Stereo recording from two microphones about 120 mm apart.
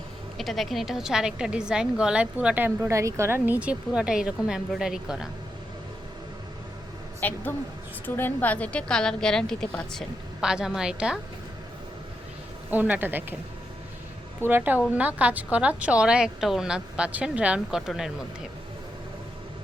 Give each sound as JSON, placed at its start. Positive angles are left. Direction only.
{"t": 0.3, "sound": "a woman's voice", "side_deg": 0}
{"t": 7.2, "sound": "a woman's voice", "side_deg": 15}
{"t": 10.4, "sound": "a woman's voice", "side_deg": -5}
{"t": 12.7, "sound": "a woman's voice", "side_deg": -15}
{"t": 14.4, "sound": "a woman's voice", "side_deg": -15}